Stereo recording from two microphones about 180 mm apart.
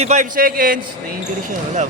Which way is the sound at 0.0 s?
40° right (ahead or behind).